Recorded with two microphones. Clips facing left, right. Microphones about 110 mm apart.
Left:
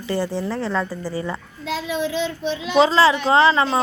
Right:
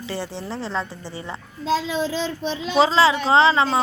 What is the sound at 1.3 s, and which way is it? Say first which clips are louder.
A child's voice: right 4 dB; 30° right (ahead or behind).